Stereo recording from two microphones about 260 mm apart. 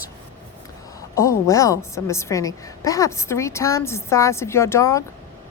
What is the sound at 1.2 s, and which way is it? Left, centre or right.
A woman's voice, centre.